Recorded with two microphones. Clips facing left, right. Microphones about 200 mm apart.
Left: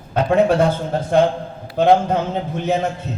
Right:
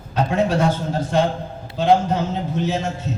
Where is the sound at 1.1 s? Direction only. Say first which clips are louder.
Left 5 dB; 55° left (ahead or behind).